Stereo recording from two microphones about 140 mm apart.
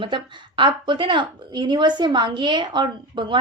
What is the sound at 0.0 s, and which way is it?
A woman's voice, 35° right (ahead or behind).